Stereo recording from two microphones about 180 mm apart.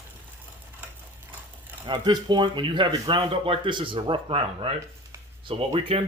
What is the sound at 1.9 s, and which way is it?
Speech, 25° right (ahead or behind).